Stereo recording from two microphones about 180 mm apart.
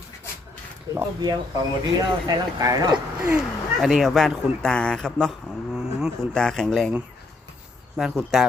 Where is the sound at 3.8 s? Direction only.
Centre (ahead or behind).